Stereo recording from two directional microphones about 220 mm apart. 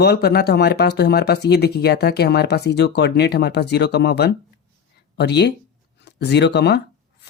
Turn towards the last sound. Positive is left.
turn(degrees=50)  # may be behind; listen again after turning